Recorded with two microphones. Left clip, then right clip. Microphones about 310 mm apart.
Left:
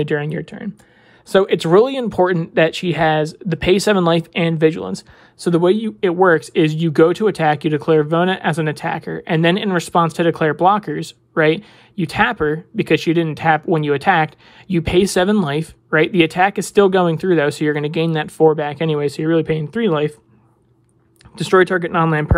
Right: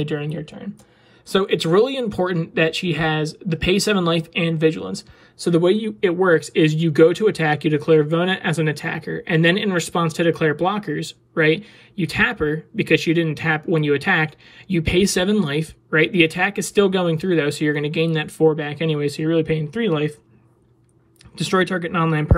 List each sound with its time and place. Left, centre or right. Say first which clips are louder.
0.0 s speech: left 6 dB; centre
21.4 s speech: left 6 dB; centre